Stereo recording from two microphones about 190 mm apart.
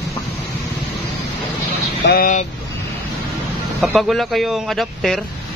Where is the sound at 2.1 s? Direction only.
45° left (ahead or behind).